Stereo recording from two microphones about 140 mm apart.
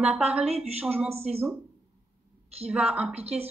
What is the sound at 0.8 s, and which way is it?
Speech, 10° right (ahead or behind).